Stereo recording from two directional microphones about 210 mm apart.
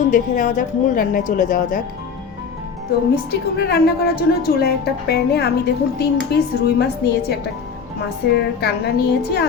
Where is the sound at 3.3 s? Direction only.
50° left (ahead or behind).